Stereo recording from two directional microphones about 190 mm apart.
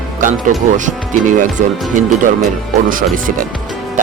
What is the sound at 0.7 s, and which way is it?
Speech, 40° right (ahead or behind).